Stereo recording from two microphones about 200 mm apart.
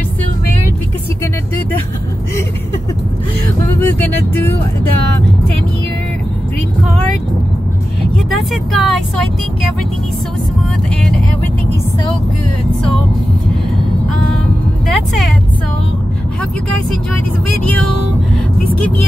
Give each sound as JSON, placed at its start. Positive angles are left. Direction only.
{"t": 3.8, "sound": "vehicle", "side_deg": 10}
{"t": 8.3, "sound": "speech", "side_deg": 0}